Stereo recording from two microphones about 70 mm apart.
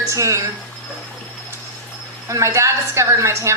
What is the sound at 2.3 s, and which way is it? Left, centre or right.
A woman's voice, right.